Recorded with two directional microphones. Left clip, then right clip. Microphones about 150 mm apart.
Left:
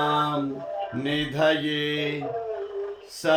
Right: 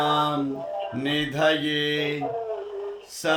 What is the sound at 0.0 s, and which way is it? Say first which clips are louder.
Music: right 1 dB; 20° right (ahead or behind).